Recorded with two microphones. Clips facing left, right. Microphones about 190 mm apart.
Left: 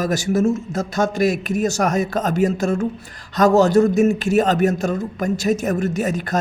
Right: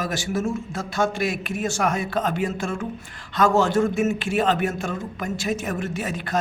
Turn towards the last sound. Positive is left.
turn(degrees=45)  # may be behind; listen again after turning